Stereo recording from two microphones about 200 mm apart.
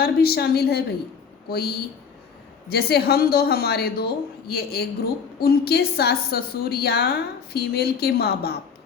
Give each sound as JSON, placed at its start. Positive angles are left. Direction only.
{"t": 0.0, "sound": "a woman's voice", "side_deg": 50}